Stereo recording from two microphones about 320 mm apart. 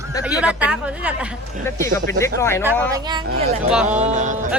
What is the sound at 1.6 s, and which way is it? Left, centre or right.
Speech, centre.